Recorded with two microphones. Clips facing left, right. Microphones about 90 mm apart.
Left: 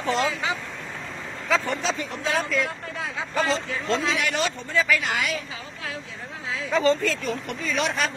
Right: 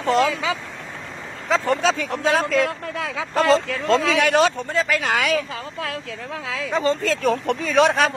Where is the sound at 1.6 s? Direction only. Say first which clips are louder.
Right 7 dB; 80° right.